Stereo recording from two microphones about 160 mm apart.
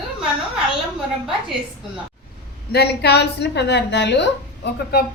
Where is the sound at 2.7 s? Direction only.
85° left.